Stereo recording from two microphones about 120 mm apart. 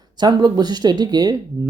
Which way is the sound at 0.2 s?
40° right (ahead or behind).